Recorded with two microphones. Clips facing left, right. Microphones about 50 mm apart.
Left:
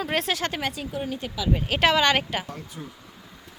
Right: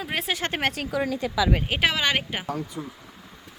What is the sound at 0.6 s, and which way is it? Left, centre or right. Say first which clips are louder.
Speech: right 3 dB; right.